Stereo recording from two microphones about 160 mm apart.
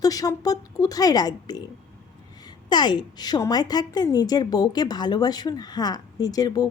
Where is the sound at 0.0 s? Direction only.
20° left (ahead or behind).